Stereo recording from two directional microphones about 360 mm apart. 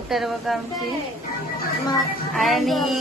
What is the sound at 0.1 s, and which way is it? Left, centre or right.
Speech, centre.